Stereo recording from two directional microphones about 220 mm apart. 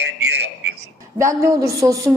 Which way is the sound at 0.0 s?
50° right (ahead or behind).